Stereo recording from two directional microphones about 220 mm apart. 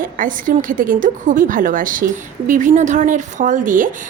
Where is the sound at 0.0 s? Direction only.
40° right (ahead or behind).